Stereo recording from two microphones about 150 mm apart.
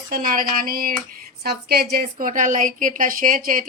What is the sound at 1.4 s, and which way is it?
Speech, 90° right.